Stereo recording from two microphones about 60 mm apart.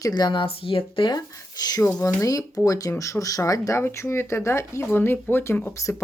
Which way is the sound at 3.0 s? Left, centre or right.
Left.